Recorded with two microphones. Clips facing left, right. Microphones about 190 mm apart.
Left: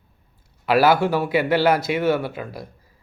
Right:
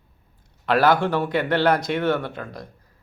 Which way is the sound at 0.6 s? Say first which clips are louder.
Left 2 dB; 5° left (ahead or behind).